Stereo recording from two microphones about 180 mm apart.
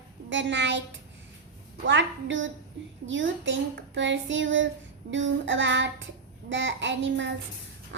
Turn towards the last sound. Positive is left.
turn(degrees=-90)